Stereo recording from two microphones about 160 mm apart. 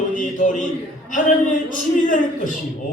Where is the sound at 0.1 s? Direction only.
55° left (ahead or behind).